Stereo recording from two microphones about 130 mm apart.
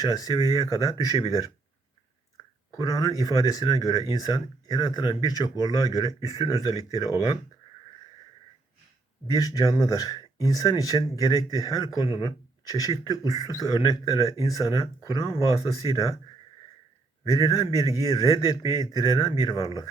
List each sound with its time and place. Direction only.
0.0 s speech: 30° left (ahead or behind)
2.7 s speech: 30° left (ahead or behind)
9.2 s speech: 30° left (ahead or behind)
17.3 s speech: 30° left (ahead or behind)